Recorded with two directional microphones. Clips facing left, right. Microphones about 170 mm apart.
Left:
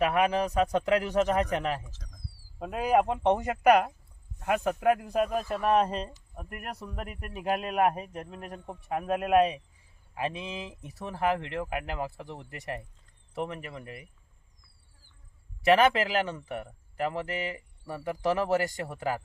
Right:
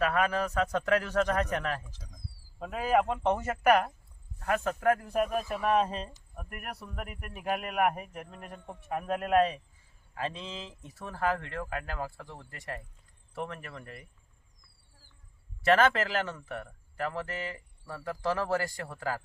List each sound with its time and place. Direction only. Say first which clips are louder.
0.0 s a man's voice: left 3 dB; 20° left (ahead or behind)
1.9 s speech: right 1 dB; 10° right (ahead or behind)
2.6 s a man's voice: left 2 dB; 15° left (ahead or behind)
5.2 s speech: left 1 dB; centre (ahead or behind)
7.3 s a man's voice: left 3 dB; 20° left (ahead or behind)
15.6 s a man's voice: left 2 dB; 15° left (ahead or behind)